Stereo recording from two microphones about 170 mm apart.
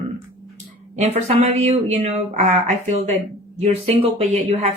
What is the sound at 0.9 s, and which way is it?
Speech, 40° right (ahead or behind).